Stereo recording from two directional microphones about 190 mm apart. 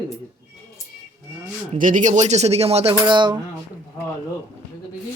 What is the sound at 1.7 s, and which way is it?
Speech, 45° right (ahead or behind).